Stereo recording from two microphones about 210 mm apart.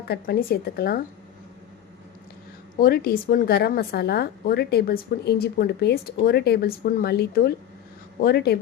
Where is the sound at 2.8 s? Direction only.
45° left (ahead or behind).